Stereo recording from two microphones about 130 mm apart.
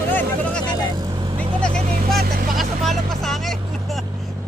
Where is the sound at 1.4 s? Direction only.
5° left (ahead or behind).